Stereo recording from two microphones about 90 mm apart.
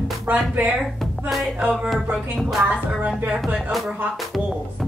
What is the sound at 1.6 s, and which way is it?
Music, 10° right (ahead or behind).